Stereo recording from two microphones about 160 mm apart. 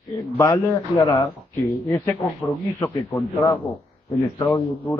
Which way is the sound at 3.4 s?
30° left (ahead or behind).